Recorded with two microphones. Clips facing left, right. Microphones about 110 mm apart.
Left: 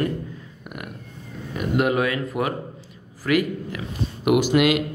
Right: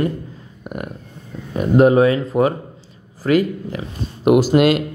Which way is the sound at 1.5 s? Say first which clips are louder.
Right 9 dB; 35° right (ahead or behind).